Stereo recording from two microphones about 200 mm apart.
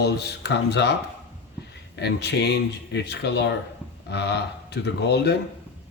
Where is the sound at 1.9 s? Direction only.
60° left (ahead or behind).